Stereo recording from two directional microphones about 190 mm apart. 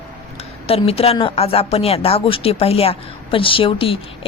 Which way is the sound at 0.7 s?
30° left (ahead or behind).